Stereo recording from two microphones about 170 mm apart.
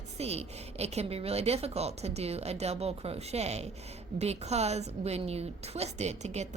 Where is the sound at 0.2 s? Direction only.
40° right (ahead or behind).